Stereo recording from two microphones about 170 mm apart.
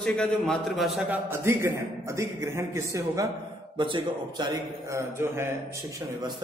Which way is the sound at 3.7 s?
30° right (ahead or behind).